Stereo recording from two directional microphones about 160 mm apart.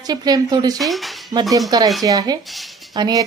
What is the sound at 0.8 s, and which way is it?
Dishes, centre (ahead or behind).